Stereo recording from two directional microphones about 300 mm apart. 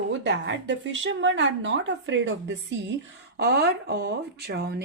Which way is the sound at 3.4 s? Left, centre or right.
Right.